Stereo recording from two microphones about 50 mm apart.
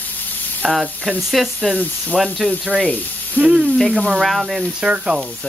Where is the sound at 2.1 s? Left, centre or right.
Left.